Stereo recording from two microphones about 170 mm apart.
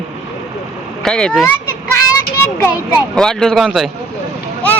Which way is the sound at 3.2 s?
5° left (ahead or behind).